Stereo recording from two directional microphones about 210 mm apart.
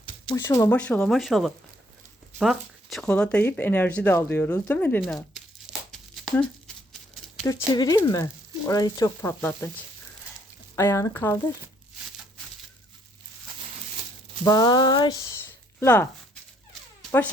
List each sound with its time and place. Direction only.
0.3 s speech: 15° left (ahead or behind)
7.4 s speech: 15° left (ahead or behind)
10.8 s speech: 10° left (ahead or behind)
14.4 s speech: 20° left (ahead or behind)